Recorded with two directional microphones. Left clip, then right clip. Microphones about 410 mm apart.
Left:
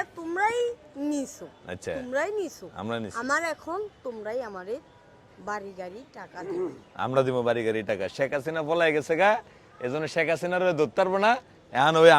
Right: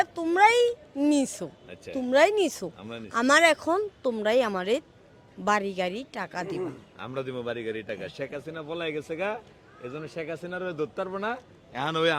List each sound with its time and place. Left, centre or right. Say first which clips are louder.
0.0 s speech: right 6 dB; right
1.6 s speech: left 6 dB; left
2.0 s speech: right 9 dB; right
2.7 s speech: left 8 dB; left
3.1 s speech: right 9 dB; right
6.9 s speech: left 13 dB; left